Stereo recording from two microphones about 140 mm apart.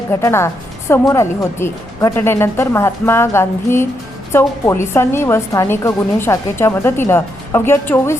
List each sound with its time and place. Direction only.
0.1 s a woman's voice: 20° left (ahead or behind)